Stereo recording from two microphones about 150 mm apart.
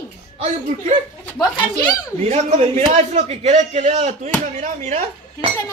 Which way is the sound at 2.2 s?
50° right (ahead or behind).